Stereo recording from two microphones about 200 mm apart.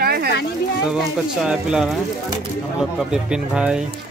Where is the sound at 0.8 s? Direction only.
5° right (ahead or behind).